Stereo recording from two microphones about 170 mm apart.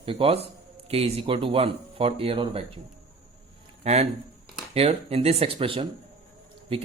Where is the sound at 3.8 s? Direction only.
40° right (ahead or behind).